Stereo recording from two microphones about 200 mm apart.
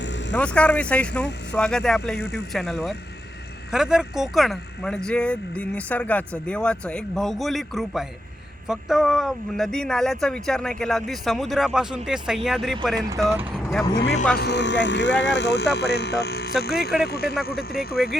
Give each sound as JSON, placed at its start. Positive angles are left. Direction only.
{"t": 0.3, "sound": "speech", "side_deg": 5}
{"t": 13.0, "sound": "speech", "side_deg": -15}
{"t": 13.3, "sound": "vehicle", "side_deg": -10}
{"t": 14.3, "sound": "speech", "side_deg": 60}
{"t": 18.0, "sound": "speech", "side_deg": 0}